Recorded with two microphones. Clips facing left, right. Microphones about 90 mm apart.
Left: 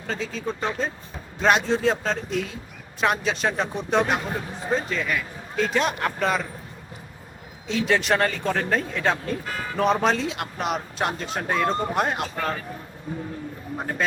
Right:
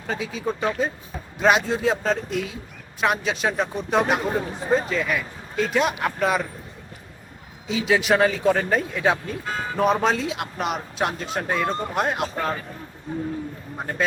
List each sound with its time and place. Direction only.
0.1 s speech: 10° right (ahead or behind)
7.7 s speech: 5° right (ahead or behind)
9.5 s speech: 25° right (ahead or behind)
9.7 s speech: 5° right (ahead or behind)